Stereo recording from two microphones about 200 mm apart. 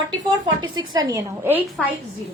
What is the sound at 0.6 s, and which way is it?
Speech, 20° right (ahead or behind).